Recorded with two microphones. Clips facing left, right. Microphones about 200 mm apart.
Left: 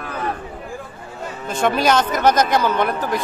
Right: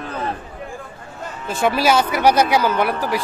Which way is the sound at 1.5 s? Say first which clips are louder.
Even; 5° right (ahead or behind).